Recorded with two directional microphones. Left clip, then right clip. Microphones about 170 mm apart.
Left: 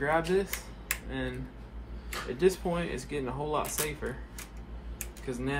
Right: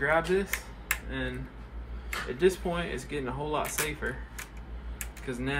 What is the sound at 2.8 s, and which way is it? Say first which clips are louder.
Speech: right 1 dB; 30° left (ahead or behind).